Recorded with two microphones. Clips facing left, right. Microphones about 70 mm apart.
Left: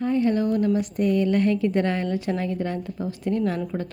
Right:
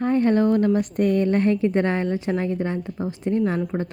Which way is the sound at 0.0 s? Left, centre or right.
Right.